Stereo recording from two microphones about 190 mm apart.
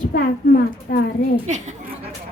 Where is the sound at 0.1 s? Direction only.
50° left (ahead or behind).